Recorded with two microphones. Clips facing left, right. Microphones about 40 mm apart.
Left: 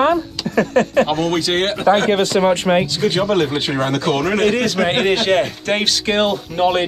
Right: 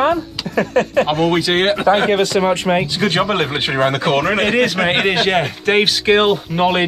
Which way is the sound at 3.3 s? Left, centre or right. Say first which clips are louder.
Left 1 dB; right.